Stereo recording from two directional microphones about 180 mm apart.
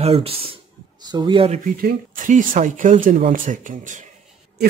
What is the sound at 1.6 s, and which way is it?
Speech, 50° right (ahead or behind).